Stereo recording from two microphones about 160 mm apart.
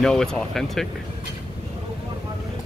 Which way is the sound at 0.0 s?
5° left (ahead or behind).